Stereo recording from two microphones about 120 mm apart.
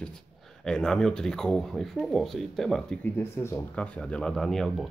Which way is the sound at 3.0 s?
15° left (ahead or behind).